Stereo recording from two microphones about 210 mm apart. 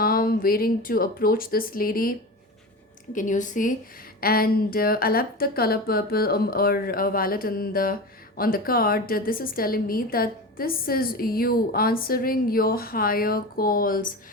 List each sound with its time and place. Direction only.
0.0 s a woman's voice: 45° left (ahead or behind)
3.2 s a woman's voice: 35° left (ahead or behind)